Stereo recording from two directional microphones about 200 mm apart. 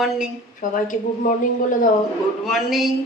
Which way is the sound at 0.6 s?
40° left (ahead or behind).